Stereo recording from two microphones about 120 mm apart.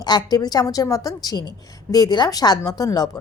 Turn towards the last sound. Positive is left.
turn(degrees=30)  # may be behind; listen again after turning